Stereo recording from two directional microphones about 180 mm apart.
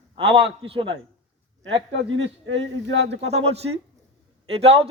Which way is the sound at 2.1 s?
90° right.